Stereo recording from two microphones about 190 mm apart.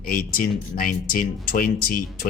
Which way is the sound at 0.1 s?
50° left (ahead or behind).